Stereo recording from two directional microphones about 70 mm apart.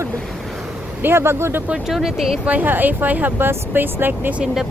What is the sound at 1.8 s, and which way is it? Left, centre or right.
Speech, centre.